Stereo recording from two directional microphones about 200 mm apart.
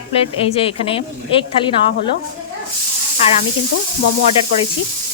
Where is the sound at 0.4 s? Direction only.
30° left (ahead or behind).